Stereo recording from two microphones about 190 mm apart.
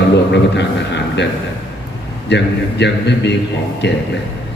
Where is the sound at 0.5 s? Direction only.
65° left (ahead or behind).